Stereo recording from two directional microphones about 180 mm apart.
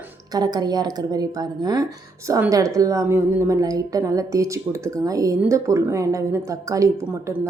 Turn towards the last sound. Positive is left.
turn(degrees=-15)  # may be behind; listen again after turning